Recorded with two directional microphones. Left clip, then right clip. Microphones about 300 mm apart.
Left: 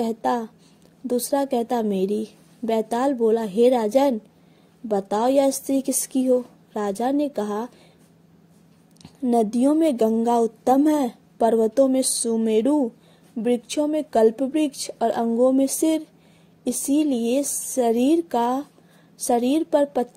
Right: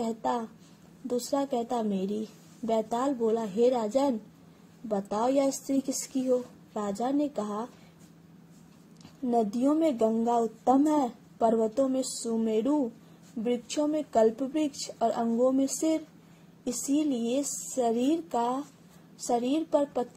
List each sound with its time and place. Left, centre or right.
0.0 s a woman's voice: left
9.2 s a woman's voice: left